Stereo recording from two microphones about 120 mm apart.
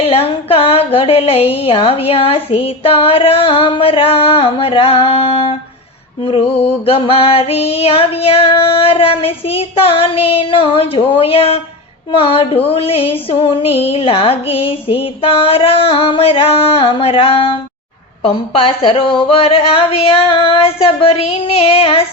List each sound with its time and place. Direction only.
0.0 s speech: 55° left (ahead or behind)